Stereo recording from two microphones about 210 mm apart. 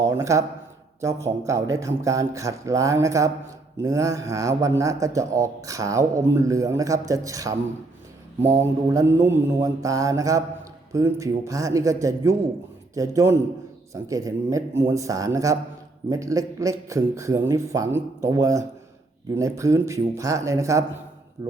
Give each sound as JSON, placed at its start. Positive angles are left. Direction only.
{"t": 0.0, "sound": "a man's voice", "side_deg": -15}